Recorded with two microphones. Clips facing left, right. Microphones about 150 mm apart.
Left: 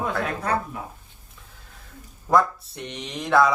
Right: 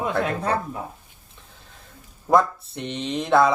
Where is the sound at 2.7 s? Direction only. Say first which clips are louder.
Right 6 dB; 25° right (ahead or behind).